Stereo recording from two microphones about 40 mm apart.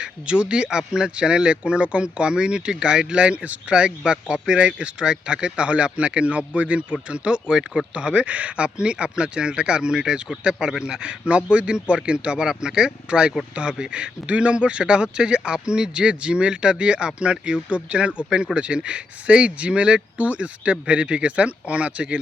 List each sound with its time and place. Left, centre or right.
0.0 s speech: right
3.7 s speech: right
7.9 s speech: right